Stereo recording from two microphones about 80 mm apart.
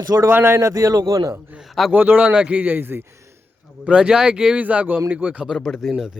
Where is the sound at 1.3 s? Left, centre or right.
Centre.